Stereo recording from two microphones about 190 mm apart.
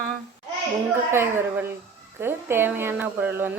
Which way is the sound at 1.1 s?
10° right (ahead or behind).